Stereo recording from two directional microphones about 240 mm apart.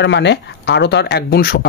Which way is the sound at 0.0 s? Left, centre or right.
Left.